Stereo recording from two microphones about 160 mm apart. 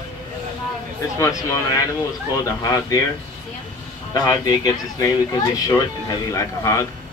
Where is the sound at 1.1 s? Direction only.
20° left (ahead or behind).